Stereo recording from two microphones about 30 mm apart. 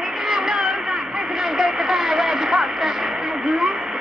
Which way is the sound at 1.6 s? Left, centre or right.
Centre.